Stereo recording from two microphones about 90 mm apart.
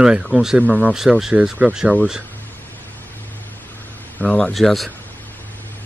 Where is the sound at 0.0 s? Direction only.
5° right (ahead or behind).